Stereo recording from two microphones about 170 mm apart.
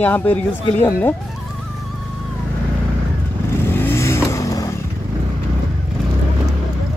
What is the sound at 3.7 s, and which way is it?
Vehicle, 15° left (ahead or behind).